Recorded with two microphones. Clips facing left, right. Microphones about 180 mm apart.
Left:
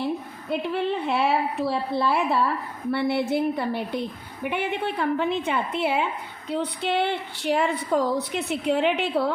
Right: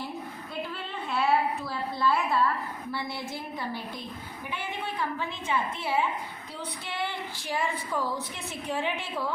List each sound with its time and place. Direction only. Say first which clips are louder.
0.7 s a woman's voice: left 10 dB; 65° left (ahead or behind)